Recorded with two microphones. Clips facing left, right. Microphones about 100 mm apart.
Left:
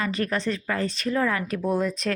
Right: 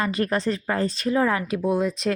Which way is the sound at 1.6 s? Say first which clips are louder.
Right 1 dB; 10° right (ahead or behind).